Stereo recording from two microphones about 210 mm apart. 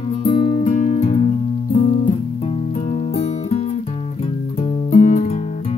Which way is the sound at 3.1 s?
30° left (ahead or behind).